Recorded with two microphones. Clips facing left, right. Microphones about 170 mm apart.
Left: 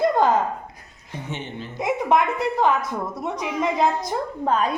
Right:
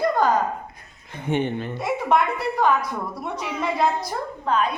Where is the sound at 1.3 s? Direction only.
55° right (ahead or behind).